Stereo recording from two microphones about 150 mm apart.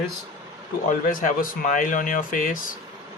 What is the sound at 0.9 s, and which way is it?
Speech, 65° left (ahead or behind).